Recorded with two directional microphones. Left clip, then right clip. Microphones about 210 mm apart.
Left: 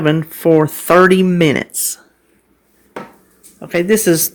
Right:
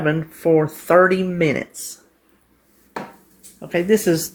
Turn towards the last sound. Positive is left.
turn(degrees=30)  # may be behind; listen again after turning